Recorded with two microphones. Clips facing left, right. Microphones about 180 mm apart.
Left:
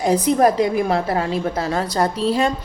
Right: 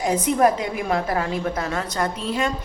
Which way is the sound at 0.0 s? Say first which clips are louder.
Left 3 dB; 35° left (ahead or behind).